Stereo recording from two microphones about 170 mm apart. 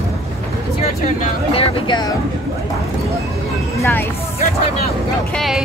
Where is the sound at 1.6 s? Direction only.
30° left (ahead or behind).